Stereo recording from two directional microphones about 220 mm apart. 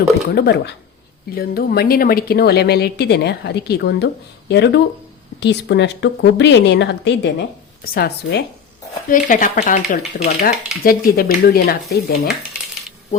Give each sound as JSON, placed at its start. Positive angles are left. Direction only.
{"t": 0.3, "sound": "a woman's voice", "side_deg": 50}
{"t": 9.0, "sound": "speech", "side_deg": 35}